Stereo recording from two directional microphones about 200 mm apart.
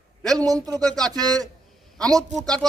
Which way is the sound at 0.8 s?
5° left (ahead or behind).